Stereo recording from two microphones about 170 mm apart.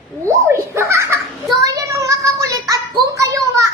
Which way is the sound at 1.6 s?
20° right (ahead or behind).